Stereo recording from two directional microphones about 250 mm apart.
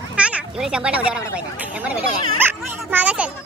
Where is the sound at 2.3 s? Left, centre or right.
Centre.